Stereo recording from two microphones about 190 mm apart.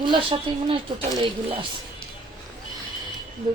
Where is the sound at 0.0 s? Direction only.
25° right (ahead or behind).